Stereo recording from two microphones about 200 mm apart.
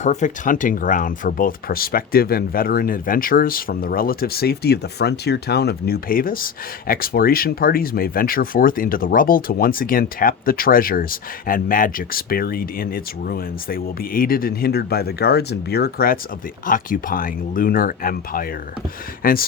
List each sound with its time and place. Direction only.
0.0 s speech: 35° left (ahead or behind)